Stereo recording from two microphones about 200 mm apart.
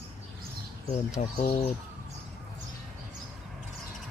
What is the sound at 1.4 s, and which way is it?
Speech, 30° left (ahead or behind).